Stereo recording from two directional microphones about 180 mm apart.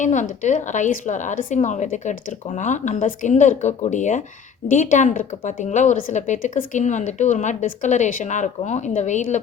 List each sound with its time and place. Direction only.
0.0 s a woman's voice: 40° left (ahead or behind)